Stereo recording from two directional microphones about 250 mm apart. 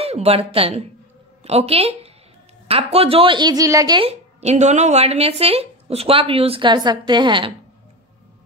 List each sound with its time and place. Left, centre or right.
0.0 s a woman's voice: right